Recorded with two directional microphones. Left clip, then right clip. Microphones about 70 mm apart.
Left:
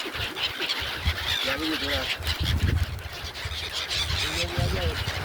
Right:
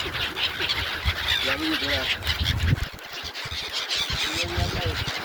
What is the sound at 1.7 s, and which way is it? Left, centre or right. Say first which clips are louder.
Duck: right 3 dB; centre.